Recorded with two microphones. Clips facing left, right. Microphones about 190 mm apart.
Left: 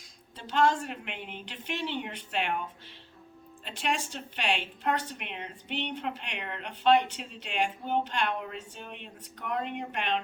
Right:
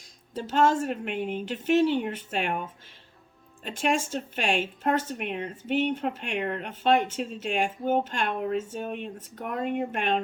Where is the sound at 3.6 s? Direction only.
45° right (ahead or behind).